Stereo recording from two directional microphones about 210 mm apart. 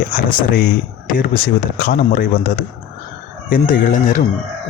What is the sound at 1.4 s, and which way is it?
Speech, 45° left (ahead or behind).